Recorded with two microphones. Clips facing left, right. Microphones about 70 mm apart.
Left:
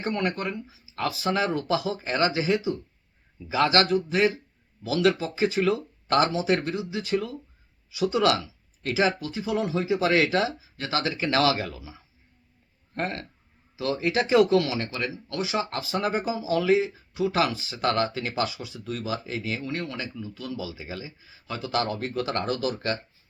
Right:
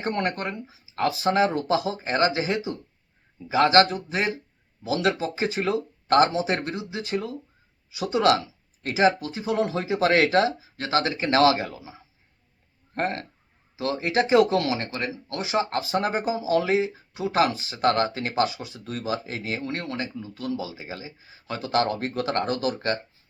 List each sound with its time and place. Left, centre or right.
0.0 s speech: right
11.3 s speech: right